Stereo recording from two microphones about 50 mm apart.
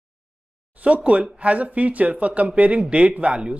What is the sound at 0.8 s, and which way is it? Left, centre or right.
Speech, right.